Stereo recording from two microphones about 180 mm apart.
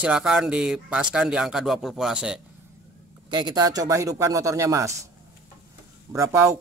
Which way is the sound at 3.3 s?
20° right (ahead or behind).